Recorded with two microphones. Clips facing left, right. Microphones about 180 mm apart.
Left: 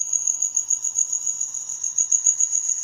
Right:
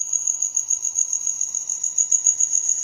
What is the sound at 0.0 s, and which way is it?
Cricket, centre (ahead or behind).